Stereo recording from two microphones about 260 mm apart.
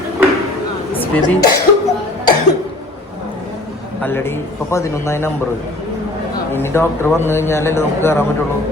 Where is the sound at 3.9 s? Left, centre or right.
Centre.